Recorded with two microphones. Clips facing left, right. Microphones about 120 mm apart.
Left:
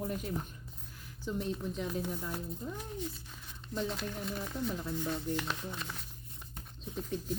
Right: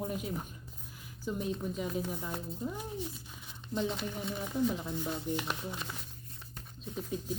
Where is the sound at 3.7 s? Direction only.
Centre (ahead or behind).